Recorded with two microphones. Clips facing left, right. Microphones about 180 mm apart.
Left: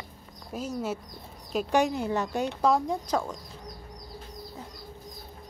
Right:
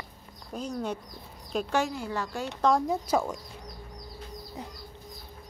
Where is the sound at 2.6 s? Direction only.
Centre (ahead or behind).